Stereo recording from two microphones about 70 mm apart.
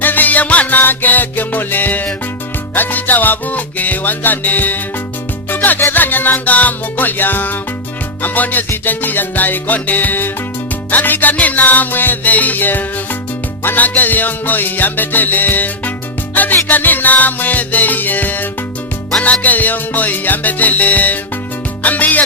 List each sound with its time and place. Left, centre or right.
0.0 s music: left